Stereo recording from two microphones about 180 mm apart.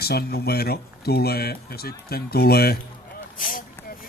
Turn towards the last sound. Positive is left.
turn(degrees=50)  # may be behind; listen again after turning